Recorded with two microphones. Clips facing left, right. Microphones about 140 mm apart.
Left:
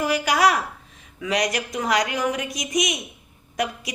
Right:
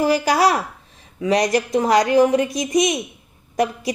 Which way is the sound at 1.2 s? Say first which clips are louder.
Right 6 dB; 35° right (ahead or behind).